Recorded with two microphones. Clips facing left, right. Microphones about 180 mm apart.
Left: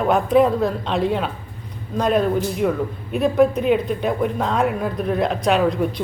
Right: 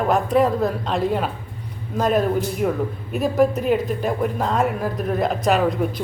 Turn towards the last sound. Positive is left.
turn(degrees=0)  # may be behind; listen again after turning